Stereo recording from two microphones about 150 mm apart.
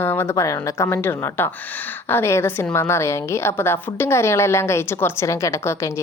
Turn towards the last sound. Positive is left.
turn(degrees=20)  # may be behind; listen again after turning